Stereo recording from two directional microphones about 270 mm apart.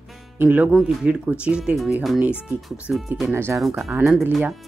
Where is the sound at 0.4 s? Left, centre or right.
Centre.